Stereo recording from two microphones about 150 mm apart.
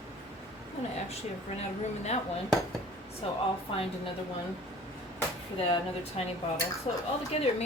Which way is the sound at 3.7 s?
35° left (ahead or behind).